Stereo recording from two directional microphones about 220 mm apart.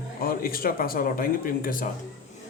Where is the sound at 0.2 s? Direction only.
40° left (ahead or behind).